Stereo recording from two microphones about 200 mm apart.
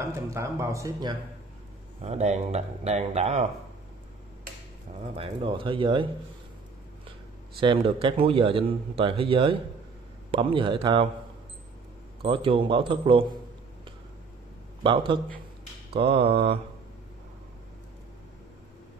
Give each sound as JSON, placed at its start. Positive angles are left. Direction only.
{"t": 0.0, "sound": "speech", "side_deg": -15}
{"t": 2.0, "sound": "speech", "side_deg": -35}
{"t": 5.1, "sound": "a man's voice", "side_deg": -25}
{"t": 7.6, "sound": "a man's voice", "side_deg": -25}
{"t": 12.2, "sound": "a man's voice", "side_deg": -25}
{"t": 14.8, "sound": "a man's voice", "side_deg": -25}